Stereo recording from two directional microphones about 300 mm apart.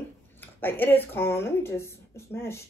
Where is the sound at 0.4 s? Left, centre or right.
Centre.